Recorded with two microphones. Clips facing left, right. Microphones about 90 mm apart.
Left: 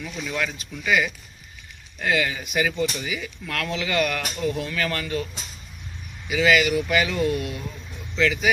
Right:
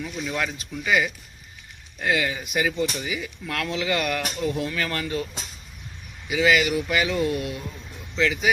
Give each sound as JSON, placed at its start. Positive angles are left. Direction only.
{"t": 0.0, "sound": "speech", "side_deg": -20}
{"t": 6.2, "sound": "speech", "side_deg": -20}